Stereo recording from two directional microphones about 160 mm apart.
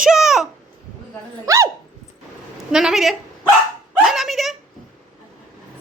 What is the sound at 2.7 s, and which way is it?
Speech, centre (ahead or behind).